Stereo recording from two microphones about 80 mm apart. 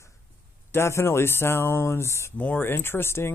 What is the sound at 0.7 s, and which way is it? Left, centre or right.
Speech, left.